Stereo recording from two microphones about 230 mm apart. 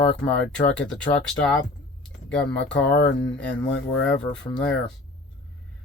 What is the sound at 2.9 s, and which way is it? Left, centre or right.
Speech, left.